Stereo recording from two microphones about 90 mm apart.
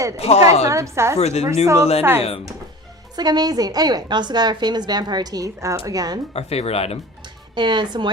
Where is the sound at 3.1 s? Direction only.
50° right (ahead or behind).